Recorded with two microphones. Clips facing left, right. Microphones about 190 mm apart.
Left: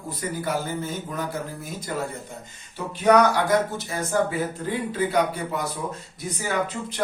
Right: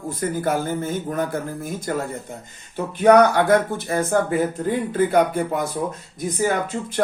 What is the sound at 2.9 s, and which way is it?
Speech, 55° right (ahead or behind).